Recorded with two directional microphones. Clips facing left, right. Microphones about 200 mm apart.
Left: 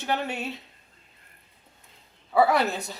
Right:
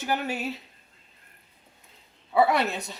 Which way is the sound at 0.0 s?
5° right (ahead or behind).